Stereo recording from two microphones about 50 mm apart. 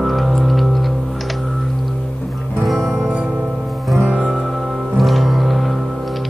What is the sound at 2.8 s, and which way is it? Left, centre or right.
Music, centre.